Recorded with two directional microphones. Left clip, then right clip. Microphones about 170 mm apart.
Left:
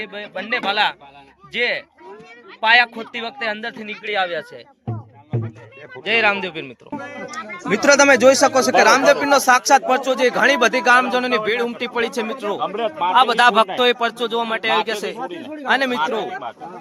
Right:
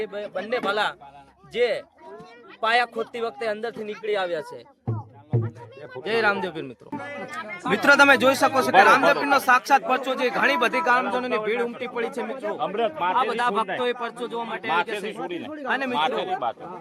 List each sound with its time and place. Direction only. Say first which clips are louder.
0.0 s speech: left 1 dB; 10° right (ahead or behind)
6.0 s speech: left 5 dB; 10° right (ahead or behind)
7.7 s speech: left 3 dB; 15° left (ahead or behind); by 12.5 s 35° left (ahead or behind)
12.5 s a man's voice: left 1 dB; 5° right (ahead or behind)
13.1 s speech: left 13 dB; 40° left (ahead or behind)